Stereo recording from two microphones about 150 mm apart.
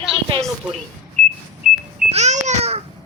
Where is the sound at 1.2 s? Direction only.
45° right (ahead or behind).